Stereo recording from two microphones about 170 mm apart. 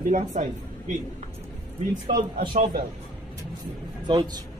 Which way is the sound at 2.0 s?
55° right (ahead or behind).